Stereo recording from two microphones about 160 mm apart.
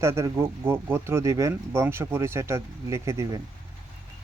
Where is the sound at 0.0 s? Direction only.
15° right (ahead or behind).